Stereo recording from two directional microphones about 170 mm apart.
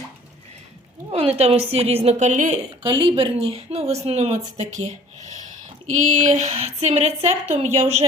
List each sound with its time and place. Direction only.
1.1 s a woman's voice: 40° right (ahead or behind)
2.8 s a woman's voice: 30° right (ahead or behind)